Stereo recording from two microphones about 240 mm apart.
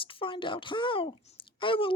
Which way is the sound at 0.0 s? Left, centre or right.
Left.